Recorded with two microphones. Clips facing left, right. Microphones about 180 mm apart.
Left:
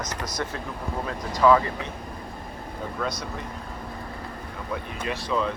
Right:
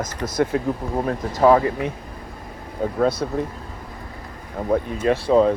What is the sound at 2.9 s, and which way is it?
Speech, 55° right (ahead or behind).